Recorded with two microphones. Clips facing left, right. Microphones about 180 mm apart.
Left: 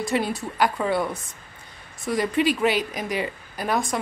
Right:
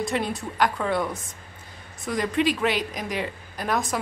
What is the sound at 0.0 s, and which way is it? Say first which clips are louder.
A woman's voice: left 2 dB; centre (ahead or behind).